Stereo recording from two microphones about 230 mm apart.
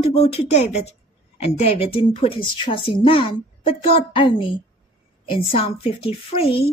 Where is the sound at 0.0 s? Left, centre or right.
Left.